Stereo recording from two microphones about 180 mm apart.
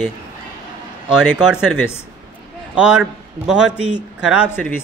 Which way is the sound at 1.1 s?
5° right (ahead or behind).